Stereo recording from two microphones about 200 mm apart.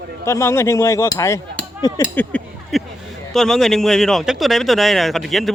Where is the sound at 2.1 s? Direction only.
5° left (ahead or behind).